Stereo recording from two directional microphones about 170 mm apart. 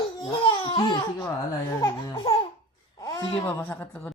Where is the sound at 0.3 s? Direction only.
30° left (ahead or behind).